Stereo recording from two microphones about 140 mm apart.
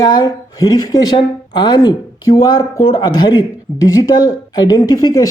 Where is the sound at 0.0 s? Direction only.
30° left (ahead or behind).